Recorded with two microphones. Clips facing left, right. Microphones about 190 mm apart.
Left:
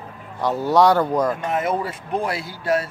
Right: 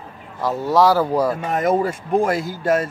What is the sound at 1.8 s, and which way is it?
Speech, 45° right (ahead or behind).